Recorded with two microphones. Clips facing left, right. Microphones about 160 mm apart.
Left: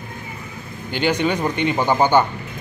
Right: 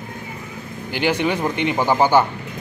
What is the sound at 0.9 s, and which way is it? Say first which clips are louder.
Speech: even; 10° right (ahead or behind).